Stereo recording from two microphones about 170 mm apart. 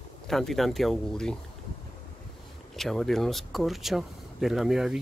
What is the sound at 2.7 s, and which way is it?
Speech, centre (ahead or behind).